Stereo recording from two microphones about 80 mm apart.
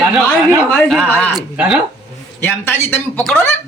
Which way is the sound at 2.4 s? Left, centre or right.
Left.